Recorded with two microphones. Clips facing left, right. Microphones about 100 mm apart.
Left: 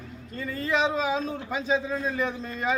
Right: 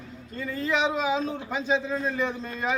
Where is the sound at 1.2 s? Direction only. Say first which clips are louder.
Right 1 dB; 15° right (ahead or behind).